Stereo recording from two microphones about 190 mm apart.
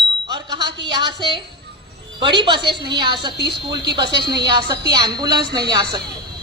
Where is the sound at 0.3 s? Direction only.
25° right (ahead or behind).